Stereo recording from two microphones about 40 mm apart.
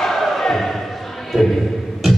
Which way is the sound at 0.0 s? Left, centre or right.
Centre.